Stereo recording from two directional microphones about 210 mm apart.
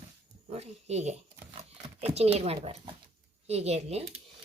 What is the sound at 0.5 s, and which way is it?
Speech, 30° right (ahead or behind).